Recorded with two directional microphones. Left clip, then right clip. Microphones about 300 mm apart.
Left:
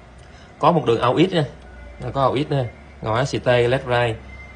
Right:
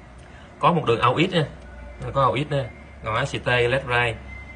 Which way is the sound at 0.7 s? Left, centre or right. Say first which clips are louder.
Left 3 dB; centre.